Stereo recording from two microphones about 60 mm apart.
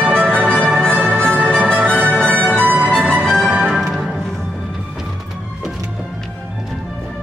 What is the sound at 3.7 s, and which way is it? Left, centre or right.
Music, centre.